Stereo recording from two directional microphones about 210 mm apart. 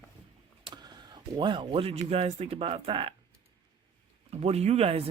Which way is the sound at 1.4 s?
20° right (ahead or behind).